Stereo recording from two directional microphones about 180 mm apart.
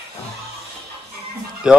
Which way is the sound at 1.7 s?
5° right (ahead or behind).